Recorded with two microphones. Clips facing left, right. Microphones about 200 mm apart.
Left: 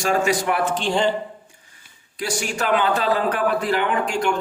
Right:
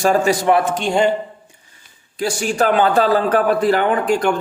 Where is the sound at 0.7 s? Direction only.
10° right (ahead or behind).